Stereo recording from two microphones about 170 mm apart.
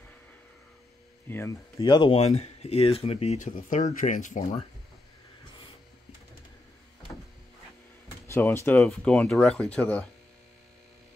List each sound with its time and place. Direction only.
1.3 s speech: 15° left (ahead or behind); by 4.6 s 50° left (ahead or behind)
8.3 s speech: 15° left (ahead or behind)